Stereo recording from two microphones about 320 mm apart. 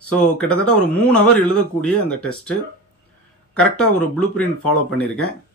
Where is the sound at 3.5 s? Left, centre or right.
Centre.